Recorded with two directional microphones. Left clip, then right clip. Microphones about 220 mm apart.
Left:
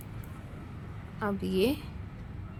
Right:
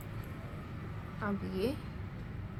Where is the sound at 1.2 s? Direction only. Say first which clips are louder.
Left 7 dB; 50° left (ahead or behind).